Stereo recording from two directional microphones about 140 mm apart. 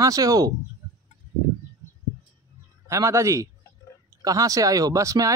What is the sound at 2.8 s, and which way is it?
Speech, 20° right (ahead or behind).